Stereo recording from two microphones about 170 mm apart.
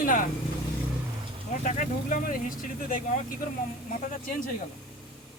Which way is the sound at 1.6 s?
50° left (ahead or behind).